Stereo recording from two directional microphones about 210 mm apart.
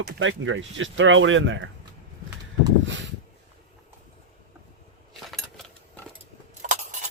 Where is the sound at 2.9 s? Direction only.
55° right (ahead or behind).